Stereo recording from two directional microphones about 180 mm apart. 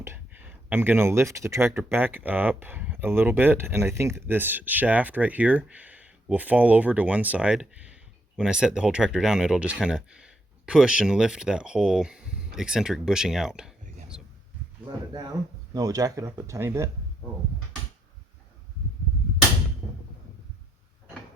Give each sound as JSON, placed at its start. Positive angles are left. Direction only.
{"t": 0.0, "sound": "speech", "side_deg": -10}
{"t": 14.1, "sound": "a sound", "side_deg": -5}
{"t": 15.7, "sound": "speech", "side_deg": -20}